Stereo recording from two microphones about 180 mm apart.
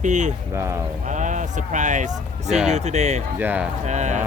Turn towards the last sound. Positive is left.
turn(degrees=-40)  # may be behind; listen again after turning